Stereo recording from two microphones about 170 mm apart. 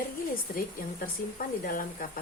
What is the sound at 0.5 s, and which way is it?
Speech, 60° left (ahead or behind).